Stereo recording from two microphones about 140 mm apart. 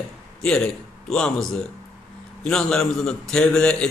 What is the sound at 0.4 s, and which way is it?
A man's voice, 5° left (ahead or behind).